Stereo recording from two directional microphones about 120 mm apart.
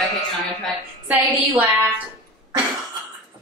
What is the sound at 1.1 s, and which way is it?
Speech, 15° right (ahead or behind).